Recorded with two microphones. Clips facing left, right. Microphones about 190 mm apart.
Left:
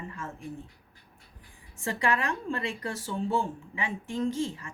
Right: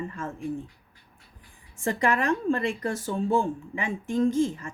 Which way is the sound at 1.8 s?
45° right (ahead or behind).